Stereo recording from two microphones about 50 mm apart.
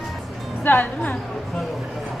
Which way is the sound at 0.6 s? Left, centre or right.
Left.